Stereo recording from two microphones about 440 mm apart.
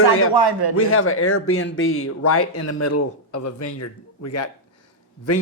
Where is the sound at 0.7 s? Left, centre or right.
Left.